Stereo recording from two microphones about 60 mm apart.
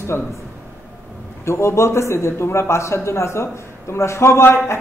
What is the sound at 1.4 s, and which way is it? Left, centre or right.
A man's voice, left.